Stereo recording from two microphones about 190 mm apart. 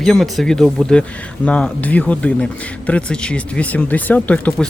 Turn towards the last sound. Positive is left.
turn(degrees=5)  # may be behind; listen again after turning